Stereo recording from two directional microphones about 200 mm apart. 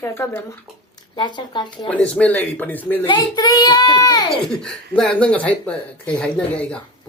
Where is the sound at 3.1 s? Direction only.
20° left (ahead or behind).